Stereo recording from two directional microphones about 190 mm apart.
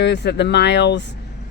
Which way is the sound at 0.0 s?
65° left (ahead or behind).